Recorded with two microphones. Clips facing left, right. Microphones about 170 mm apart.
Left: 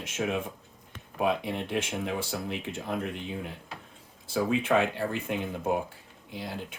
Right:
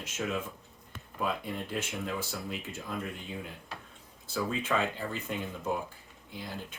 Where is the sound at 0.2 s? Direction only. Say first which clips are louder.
Left 4 dB; 60° left (ahead or behind).